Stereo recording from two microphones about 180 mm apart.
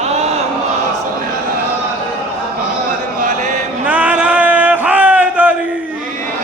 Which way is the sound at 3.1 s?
45° right (ahead or behind).